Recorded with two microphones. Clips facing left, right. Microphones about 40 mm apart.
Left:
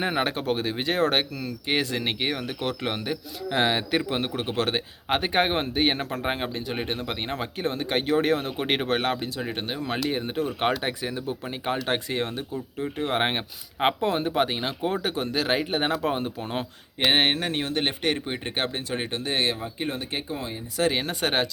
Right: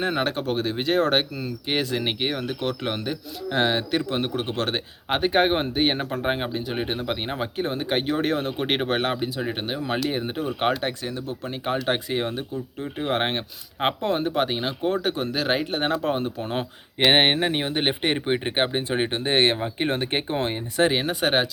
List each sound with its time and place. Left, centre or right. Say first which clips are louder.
0.0 s speech: right 1 dB; centre
11.0 s speech: even; centre
17.1 s speech: right 3 dB; right
20.9 s speech: right 3 dB; centre